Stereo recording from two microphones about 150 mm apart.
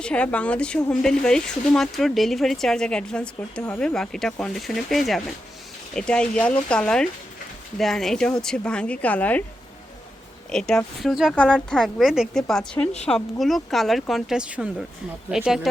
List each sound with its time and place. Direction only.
0.0 s a woman's voice: 10° left (ahead or behind)
10.5 s speech: 5° left (ahead or behind)